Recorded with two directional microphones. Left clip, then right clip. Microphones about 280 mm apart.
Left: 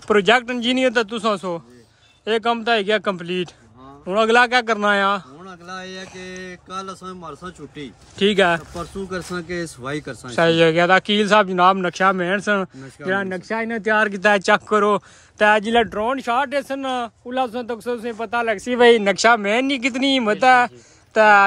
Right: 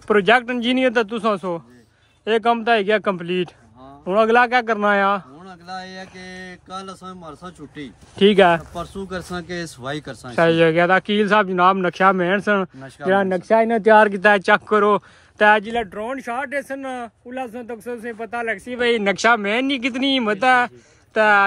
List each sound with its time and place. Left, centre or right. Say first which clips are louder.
0.1 s a man's voice: even; centre
15.7 s speech: left 6 dB; left
16.2 s speech: left 5 dB; centre
19.0 s a man's voice: left 1 dB; centre